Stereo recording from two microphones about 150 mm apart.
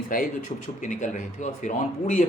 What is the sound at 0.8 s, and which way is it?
Speech, 55° left (ahead or behind).